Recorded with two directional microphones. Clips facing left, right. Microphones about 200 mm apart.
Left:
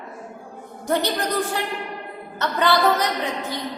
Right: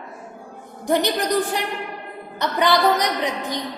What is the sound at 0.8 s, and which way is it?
A woman's voice, 15° right (ahead or behind).